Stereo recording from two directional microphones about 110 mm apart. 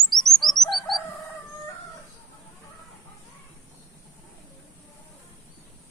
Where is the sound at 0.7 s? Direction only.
Centre (ahead or behind).